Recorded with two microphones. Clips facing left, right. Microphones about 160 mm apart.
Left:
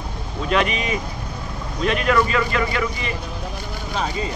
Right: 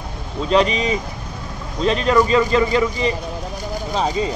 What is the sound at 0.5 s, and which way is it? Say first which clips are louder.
Speech: right 4 dB; 30° right (ahead or behind).